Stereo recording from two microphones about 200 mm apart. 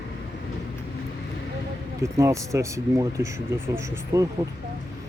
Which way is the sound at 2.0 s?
15° right (ahead or behind).